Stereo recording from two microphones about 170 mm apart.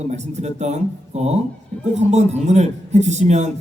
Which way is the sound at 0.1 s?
40° right (ahead or behind).